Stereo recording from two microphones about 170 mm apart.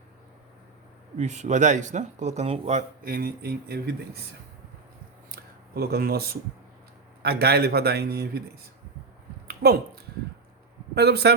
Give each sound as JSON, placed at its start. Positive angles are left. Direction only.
{"t": 1.2, "sound": "speech", "side_deg": -45}
{"t": 3.0, "sound": "speech", "side_deg": -60}
{"t": 5.3, "sound": "a sound", "side_deg": -65}
{"t": 7.2, "sound": "a man's voice", "side_deg": -70}
{"t": 9.5, "sound": "a sound", "side_deg": -65}
{"t": 10.9, "sound": "a man's voice", "side_deg": -70}